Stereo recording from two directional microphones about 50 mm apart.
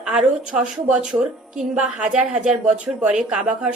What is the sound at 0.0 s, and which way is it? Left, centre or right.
A woman's voice, centre.